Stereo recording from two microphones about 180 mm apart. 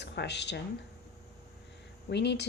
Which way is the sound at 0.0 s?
70° left (ahead or behind).